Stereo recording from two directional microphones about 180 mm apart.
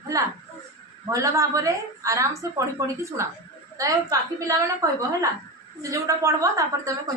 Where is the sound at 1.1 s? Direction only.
15° right (ahead or behind).